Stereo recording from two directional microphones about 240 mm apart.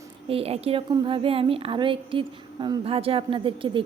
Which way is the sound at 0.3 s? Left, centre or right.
Right.